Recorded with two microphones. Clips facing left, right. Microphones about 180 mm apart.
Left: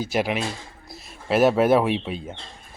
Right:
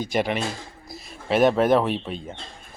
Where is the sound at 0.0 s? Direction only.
5° left (ahead or behind).